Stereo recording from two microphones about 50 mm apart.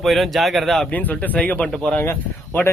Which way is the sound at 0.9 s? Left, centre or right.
Left.